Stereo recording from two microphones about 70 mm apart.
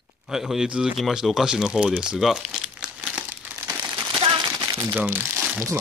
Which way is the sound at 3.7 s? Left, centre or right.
Right.